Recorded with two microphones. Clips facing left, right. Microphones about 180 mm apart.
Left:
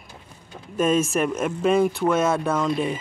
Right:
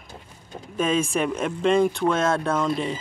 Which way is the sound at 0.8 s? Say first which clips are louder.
Left 2 dB; 5° left (ahead or behind).